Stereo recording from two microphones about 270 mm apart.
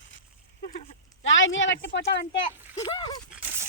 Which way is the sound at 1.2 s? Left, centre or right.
Left.